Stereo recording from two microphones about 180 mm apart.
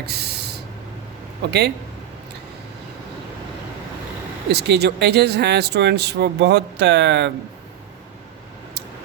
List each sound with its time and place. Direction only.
0.0 s a sound: 65° right (ahead or behind)
1.5 s speech: 70° right (ahead or behind)
4.4 s speech: 65° right (ahead or behind)